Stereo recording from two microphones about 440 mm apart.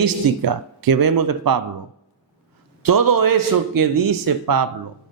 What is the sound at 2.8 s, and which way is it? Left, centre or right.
A man's voice, right.